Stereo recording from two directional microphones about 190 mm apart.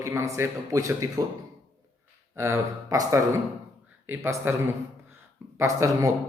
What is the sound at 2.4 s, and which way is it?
Speech, 15° right (ahead or behind).